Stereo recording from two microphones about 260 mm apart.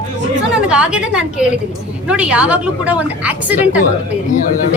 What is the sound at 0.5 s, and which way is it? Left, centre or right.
Speech, centre.